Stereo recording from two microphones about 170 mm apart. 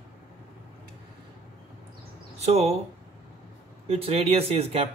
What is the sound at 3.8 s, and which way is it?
Speech, 35° right (ahead or behind).